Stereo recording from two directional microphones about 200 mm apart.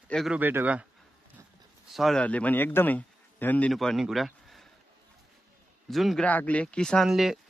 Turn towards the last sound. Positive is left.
turn(degrees=0)  # may be behind; listen again after turning